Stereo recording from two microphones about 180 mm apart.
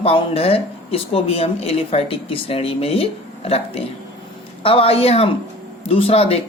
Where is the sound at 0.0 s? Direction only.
35° left (ahead or behind).